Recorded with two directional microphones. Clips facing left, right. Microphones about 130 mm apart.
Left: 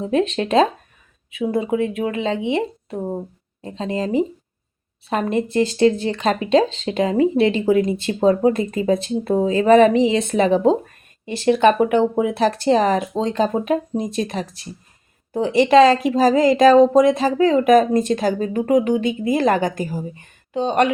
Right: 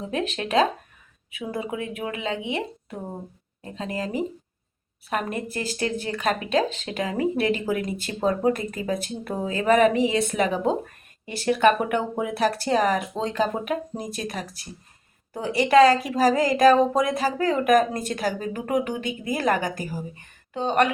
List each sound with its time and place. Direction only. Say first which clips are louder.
0.0 s speech: left 8 dB; 30° left (ahead or behind)